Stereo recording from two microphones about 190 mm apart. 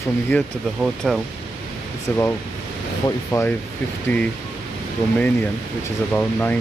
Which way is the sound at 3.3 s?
15° left (ahead or behind).